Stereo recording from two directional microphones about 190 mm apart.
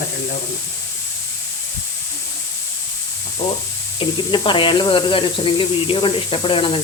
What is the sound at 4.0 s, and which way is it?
Speech, 25° left (ahead or behind).